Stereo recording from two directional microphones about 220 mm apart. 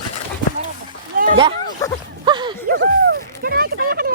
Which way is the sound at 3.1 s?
45° right (ahead or behind).